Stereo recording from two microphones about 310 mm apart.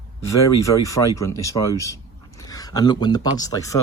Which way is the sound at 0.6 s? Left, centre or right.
Centre.